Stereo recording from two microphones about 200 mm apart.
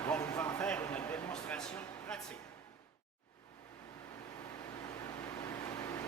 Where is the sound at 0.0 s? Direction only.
10° left (ahead or behind).